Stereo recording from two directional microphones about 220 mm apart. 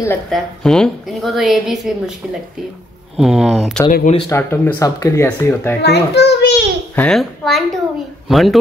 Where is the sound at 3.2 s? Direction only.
Centre (ahead or behind).